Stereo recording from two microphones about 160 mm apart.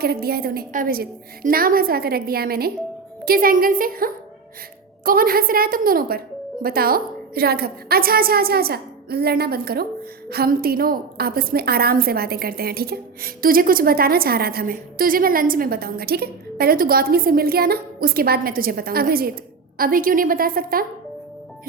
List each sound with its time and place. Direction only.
0.0 s a woman's voice: 75° right (ahead or behind)
3.2 s a woman's voice: 65° right (ahead or behind)